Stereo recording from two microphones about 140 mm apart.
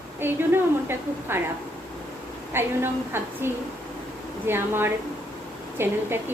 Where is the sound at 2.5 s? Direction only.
15° right (ahead or behind).